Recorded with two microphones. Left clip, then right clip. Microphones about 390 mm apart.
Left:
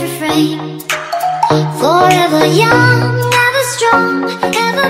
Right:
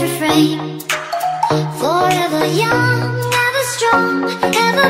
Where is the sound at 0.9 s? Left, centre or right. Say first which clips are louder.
Left 3 dB; left.